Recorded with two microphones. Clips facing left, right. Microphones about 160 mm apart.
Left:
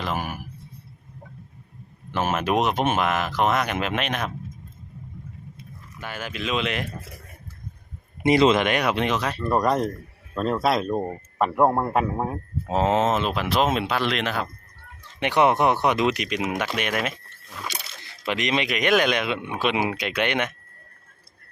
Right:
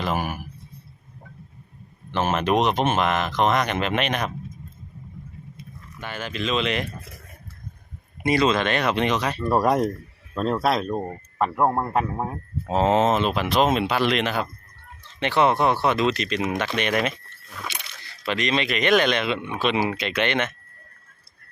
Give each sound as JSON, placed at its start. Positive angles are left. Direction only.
{"t": 0.0, "sound": "a sound", "side_deg": -5}
{"t": 2.0, "sound": "speech", "side_deg": 5}
{"t": 6.0, "sound": "speech", "side_deg": 5}
{"t": 8.2, "sound": "speech", "side_deg": 20}
{"t": 9.4, "sound": "speech", "side_deg": -10}
{"t": 10.3, "sound": "speech", "side_deg": 0}
{"t": 11.1, "sound": "speech", "side_deg": 15}
{"t": 11.5, "sound": "speech", "side_deg": 0}
{"t": 15.2, "sound": "speech", "side_deg": 15}
{"t": 18.3, "sound": "speech", "side_deg": 15}